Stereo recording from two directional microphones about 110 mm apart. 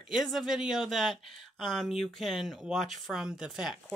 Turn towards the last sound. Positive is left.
turn(degrees=-5)  # may be behind; listen again after turning